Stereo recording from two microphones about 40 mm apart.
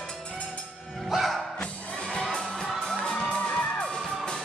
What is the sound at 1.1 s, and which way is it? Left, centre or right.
Music, centre.